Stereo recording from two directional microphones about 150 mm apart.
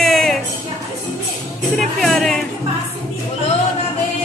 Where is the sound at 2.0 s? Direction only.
Centre (ahead or behind).